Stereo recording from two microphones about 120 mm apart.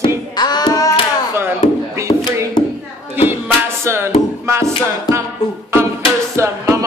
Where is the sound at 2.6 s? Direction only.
35° left (ahead or behind).